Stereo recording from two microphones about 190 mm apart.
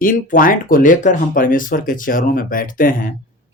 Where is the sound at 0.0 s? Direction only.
45° left (ahead or behind).